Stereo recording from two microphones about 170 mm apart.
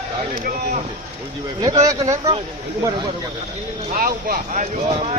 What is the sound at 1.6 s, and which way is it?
Speech, 20° right (ahead or behind).